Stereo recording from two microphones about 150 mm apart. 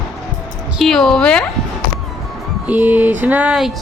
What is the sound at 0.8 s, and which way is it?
Speech, centre (ahead or behind).